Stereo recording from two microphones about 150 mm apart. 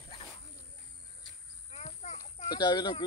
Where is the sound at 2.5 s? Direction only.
30° left (ahead or behind).